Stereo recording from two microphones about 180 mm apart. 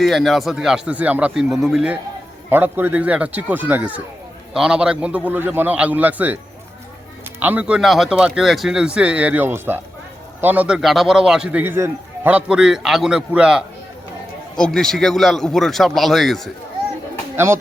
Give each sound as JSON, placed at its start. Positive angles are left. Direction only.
{"t": 0.0, "sound": "a man's voice", "side_deg": 0}
{"t": 17.3, "sound": "speech", "side_deg": -15}